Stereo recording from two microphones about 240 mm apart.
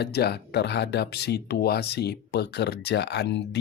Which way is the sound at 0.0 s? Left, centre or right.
Left.